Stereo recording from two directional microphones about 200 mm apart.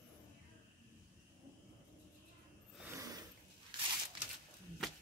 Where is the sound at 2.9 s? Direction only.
15° right (ahead or behind).